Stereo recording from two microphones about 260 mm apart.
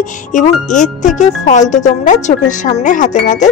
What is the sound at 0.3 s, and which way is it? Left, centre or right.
Speech, left.